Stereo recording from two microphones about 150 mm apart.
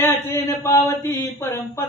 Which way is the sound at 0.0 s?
15° left (ahead or behind).